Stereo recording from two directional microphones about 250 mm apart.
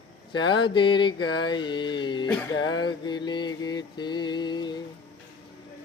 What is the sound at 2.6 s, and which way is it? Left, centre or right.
Mantra, left.